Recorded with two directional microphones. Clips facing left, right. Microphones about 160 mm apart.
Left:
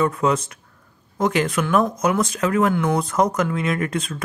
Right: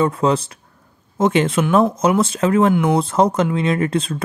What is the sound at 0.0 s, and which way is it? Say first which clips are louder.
Speech: right 3 dB; 30° right (ahead or behind).